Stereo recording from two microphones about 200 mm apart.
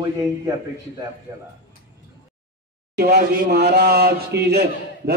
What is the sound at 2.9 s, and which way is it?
Speech, 50° right (ahead or behind).